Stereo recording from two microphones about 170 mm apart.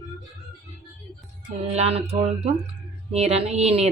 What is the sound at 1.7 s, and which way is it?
A woman's voice, 35° right (ahead or behind).